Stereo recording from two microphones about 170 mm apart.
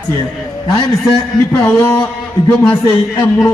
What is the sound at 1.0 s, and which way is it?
A man's voice, 10° left (ahead or behind).